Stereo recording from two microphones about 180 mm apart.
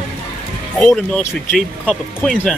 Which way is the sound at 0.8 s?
5° left (ahead or behind).